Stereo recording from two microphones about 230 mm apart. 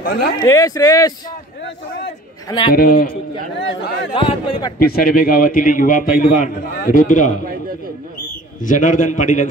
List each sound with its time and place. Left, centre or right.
0.0 s a man's voice: left
0.5 s speech: centre
2.7 s a man's voice: left
4.1 s speech: left
4.7 s a man's voice: left
8.6 s a man's voice: left